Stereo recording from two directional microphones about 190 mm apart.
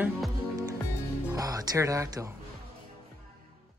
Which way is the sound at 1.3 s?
15° right (ahead or behind).